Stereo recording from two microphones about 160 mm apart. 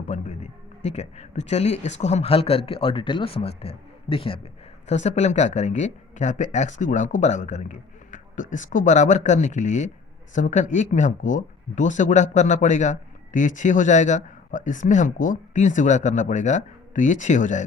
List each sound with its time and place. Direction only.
0.1 s speech: 45° left (ahead or behind)